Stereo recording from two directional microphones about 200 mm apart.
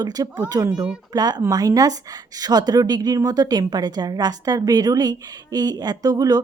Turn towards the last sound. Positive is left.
turn(degrees=-20)  # may be behind; listen again after turning